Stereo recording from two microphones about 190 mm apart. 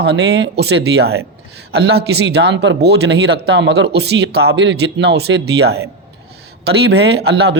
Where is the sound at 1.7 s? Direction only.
60° right (ahead or behind).